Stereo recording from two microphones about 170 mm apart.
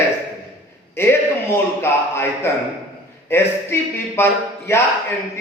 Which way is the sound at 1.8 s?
15° left (ahead or behind).